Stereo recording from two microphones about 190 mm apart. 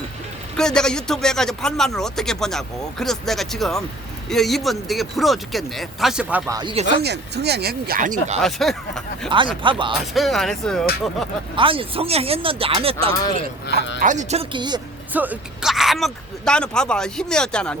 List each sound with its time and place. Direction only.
0.5 s speech: 5° left (ahead or behind)
6.5 s speech: 20° right (ahead or behind)
7.0 s speech: 60° right (ahead or behind); by 8.4 s 45° right (ahead or behind)
8.4 s speech: centre (ahead or behind)
9.3 s speech: 25° right (ahead or behind)
10.2 s speech: centre (ahead or behind)
11.5 s speech: 30° right (ahead or behind)
14.0 s a woman's voice: 40° right (ahead or behind); by 14.8 s 25° right (ahead or behind)
15.1 s speech: 10° right (ahead or behind)